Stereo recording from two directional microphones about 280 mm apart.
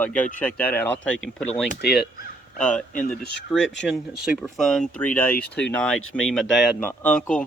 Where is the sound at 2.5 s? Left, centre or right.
Centre.